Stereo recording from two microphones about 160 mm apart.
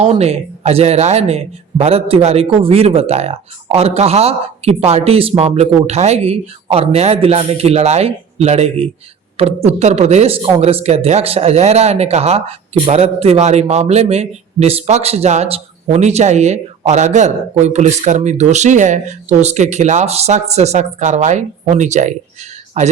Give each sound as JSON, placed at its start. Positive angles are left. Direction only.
{"t": 0.2, "sound": "a man's voice", "side_deg": -40}